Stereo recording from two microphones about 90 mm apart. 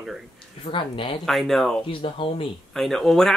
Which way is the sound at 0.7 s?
60° left (ahead or behind).